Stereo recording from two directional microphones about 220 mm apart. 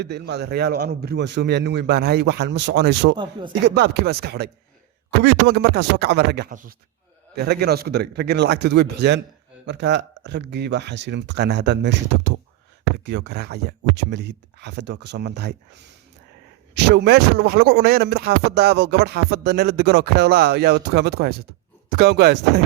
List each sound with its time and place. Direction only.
0.0 s speech: 50° right (ahead or behind)